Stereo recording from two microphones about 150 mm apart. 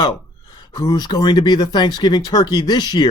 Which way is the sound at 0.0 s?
30° left (ahead or behind).